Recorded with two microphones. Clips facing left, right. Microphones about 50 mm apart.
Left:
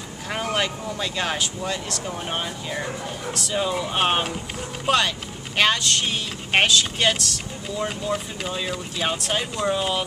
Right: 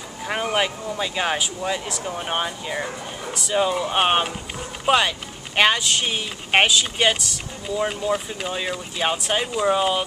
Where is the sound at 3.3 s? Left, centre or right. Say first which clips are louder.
Right 4 dB; centre.